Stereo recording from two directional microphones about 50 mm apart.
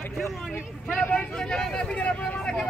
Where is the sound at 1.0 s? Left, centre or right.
Left.